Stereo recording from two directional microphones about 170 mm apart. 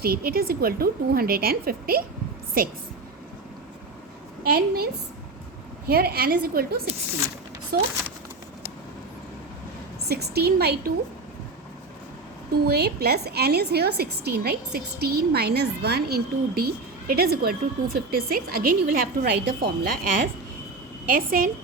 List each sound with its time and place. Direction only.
0.0 s a woman's voice: 65° right (ahead or behind)
4.4 s a woman's voice: 65° right (ahead or behind)
5.9 s a woman's voice: 65° right (ahead or behind)
10.1 s a woman's voice: 70° right (ahead or behind)
12.6 s a woman's voice: 70° right (ahead or behind)
21.1 s a woman's voice: 55° right (ahead or behind)